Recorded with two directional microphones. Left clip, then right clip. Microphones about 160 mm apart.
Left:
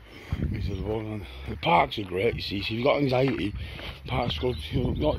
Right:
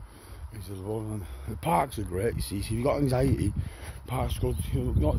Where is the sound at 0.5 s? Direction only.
35° right (ahead or behind).